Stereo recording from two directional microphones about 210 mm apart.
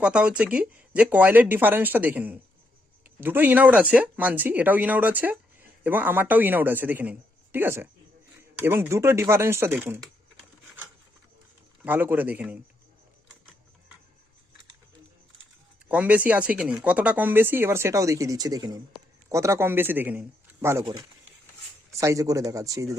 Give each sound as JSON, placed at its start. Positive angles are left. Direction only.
{"t": 0.0, "sound": "speech", "side_deg": -5}
{"t": 11.9, "sound": "speech", "side_deg": -10}
{"t": 15.9, "sound": "speech", "side_deg": -5}
{"t": 22.0, "sound": "speech", "side_deg": -15}